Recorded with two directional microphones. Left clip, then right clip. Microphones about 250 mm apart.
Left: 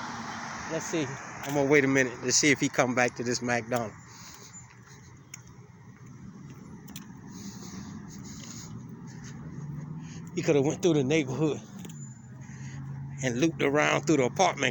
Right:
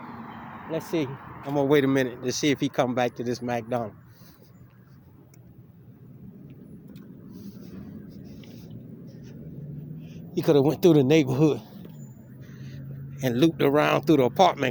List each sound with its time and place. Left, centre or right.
0.0 s vehicle: centre
0.7 s speech: right
1.7 s speech: centre
10.3 s speech: right
10.8 s speech: right
12.5 s speech: centre